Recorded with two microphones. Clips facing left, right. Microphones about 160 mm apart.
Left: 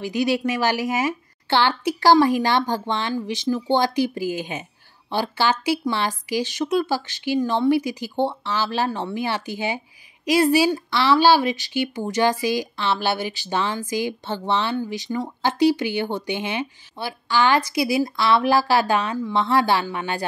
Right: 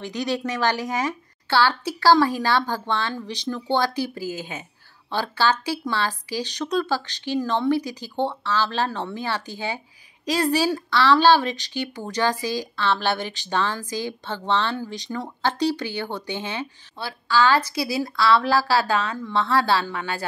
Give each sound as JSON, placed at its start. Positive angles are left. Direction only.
{"t": 0.0, "sound": "speech", "side_deg": 10}
{"t": 3.2, "sound": "speech", "side_deg": 5}
{"t": 3.5, "sound": "speech", "side_deg": 15}
{"t": 15.0, "sound": "speech", "side_deg": 0}
{"t": 15.4, "sound": "speech", "side_deg": 15}